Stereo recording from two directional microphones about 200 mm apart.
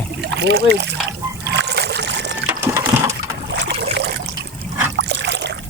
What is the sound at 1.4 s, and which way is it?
Trickle, 55° right (ahead or behind).